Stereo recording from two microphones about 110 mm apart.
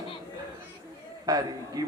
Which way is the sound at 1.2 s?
35° right (ahead or behind).